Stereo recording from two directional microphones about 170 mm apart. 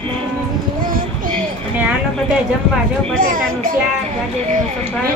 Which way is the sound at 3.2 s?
55° right (ahead or behind).